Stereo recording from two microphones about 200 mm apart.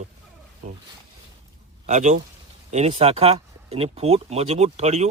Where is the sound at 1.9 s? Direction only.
35° right (ahead or behind).